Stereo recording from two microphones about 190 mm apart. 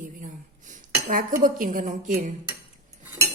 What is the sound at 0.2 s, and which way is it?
Dishes, 40° right (ahead or behind).